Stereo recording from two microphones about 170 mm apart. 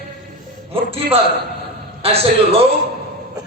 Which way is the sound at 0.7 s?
35° right (ahead or behind).